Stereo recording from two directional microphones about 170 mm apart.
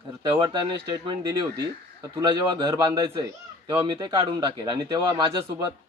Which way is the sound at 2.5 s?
25° right (ahead or behind).